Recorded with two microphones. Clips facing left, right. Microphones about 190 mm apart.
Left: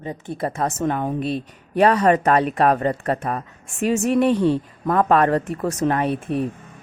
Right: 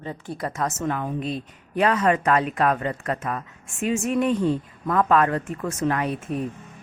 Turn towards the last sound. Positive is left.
turn(degrees=65)  # may be behind; listen again after turning